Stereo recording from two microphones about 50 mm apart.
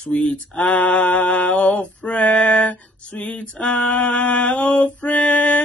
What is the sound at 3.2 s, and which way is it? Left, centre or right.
Mantra, left.